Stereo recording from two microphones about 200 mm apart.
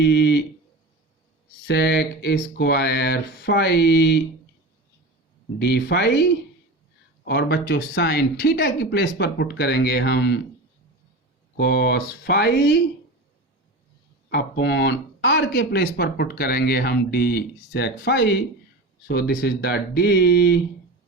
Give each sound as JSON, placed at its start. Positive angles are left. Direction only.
{"t": 0.0, "sound": "speech", "side_deg": 60}
{"t": 1.6, "sound": "speech", "side_deg": 60}
{"t": 5.5, "sound": "speech", "side_deg": 60}
{"t": 7.3, "sound": "speech", "side_deg": 55}
{"t": 11.5, "sound": "speech", "side_deg": 55}
{"t": 14.3, "sound": "speech", "side_deg": 55}